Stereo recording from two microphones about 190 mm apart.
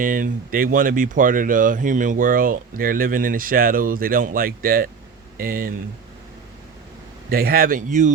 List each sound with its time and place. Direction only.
0.0 s speech: 45° right (ahead or behind)
7.3 s speech: 50° right (ahead or behind)